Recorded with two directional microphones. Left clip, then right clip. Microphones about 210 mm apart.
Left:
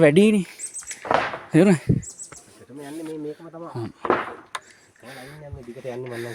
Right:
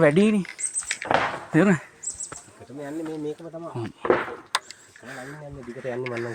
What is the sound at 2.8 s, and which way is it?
Speech, 45° right (ahead or behind).